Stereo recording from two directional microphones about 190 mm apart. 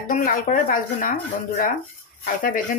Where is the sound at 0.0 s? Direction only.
45° left (ahead or behind).